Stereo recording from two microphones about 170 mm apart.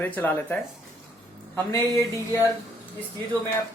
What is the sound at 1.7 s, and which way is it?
Speech, 15° left (ahead or behind).